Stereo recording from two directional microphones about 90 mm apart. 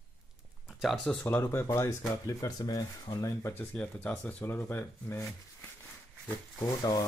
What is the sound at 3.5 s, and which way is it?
Speech, 20° left (ahead or behind).